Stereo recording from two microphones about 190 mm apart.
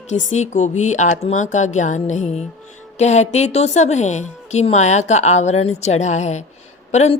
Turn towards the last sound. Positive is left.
turn(degrees=35)  # may be behind; listen again after turning